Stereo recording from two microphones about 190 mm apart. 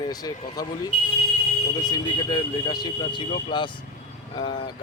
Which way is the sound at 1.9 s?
20° left (ahead or behind).